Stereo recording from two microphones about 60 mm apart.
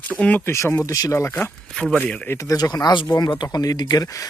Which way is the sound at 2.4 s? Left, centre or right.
Left.